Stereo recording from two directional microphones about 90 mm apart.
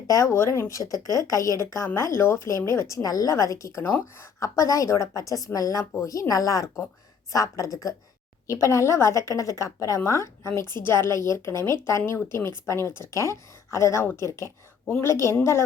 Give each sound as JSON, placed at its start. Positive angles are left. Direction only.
{"t": 0.1, "sound": "a woman's voice", "side_deg": 35}